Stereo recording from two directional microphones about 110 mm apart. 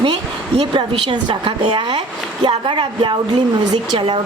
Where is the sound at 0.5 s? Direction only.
50° right (ahead or behind).